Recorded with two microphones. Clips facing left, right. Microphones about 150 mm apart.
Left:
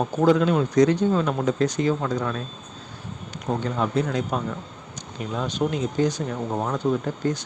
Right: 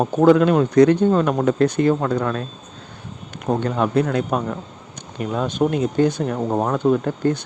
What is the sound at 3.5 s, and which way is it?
Speech, 60° right (ahead or behind).